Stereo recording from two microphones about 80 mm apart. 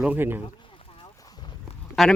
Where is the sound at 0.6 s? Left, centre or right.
Left.